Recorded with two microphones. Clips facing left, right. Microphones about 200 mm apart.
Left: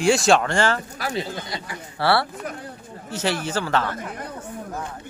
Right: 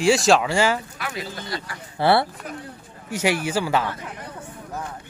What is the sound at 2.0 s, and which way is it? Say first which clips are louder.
Speech: right 2 dB; 20° right (ahead or behind).